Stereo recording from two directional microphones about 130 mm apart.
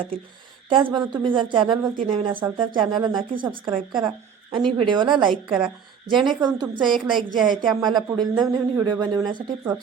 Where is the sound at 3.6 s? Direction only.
35° right (ahead or behind).